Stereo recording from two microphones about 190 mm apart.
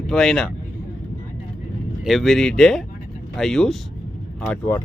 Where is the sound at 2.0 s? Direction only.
Centre (ahead or behind).